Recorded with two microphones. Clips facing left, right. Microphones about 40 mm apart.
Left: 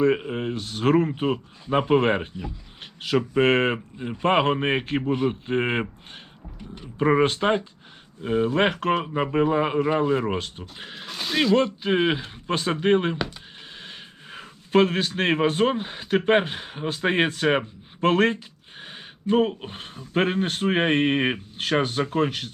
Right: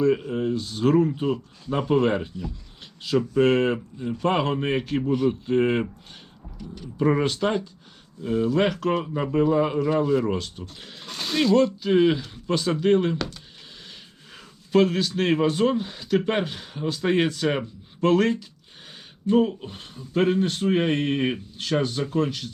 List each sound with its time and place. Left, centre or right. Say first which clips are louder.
0.0 s speech: even; left
10.6 s speech: left 2 dB; left
11.0 s speech: even; centre
11.5 s speech: right 4 dB; left